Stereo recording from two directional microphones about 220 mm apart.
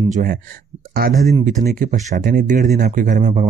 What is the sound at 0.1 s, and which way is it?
Speech, 40° right (ahead or behind).